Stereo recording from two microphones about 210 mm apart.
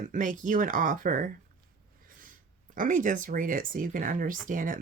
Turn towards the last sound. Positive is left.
turn(degrees=-40)  # may be behind; listen again after turning